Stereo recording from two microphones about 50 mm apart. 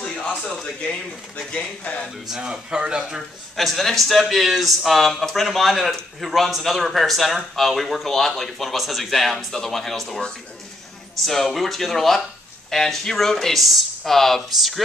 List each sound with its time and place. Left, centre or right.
0.0 s a sound: left
1.5 s speech: left
2.3 s speech: centre
3.2 s speech: centre
11.2 s speech: centre